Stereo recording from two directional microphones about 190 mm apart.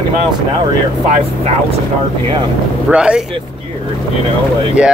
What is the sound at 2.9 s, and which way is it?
Speech, 5° right (ahead or behind).